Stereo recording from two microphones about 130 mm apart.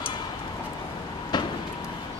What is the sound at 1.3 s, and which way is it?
Vehicle, 35° left (ahead or behind).